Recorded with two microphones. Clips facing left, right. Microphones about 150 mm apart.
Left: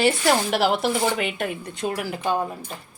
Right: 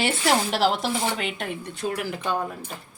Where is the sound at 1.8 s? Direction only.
25° left (ahead or behind).